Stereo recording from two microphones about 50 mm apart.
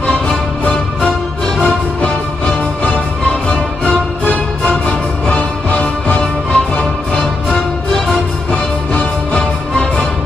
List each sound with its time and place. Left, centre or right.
0.1 s music: centre
2.0 s music: left
3.3 s music: centre
8.5 s music: left